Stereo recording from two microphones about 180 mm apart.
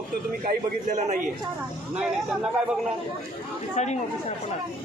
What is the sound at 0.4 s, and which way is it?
Speech, 45° right (ahead or behind).